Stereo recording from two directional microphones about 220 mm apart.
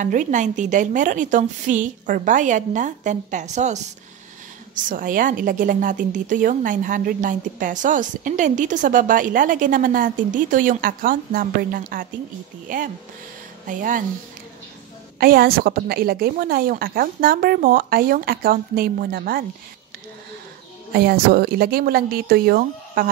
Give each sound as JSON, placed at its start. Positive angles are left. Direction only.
{"t": 0.0, "sound": "a woman's voice", "side_deg": -35}
{"t": 15.1, "sound": "a woman's voice", "side_deg": -40}
{"t": 20.9, "sound": "speech", "side_deg": -45}